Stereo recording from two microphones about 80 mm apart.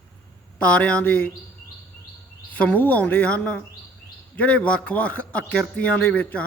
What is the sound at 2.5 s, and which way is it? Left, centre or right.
A man's voice, centre.